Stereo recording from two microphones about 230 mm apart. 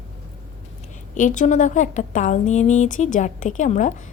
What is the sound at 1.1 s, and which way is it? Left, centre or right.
A woman's voice, left.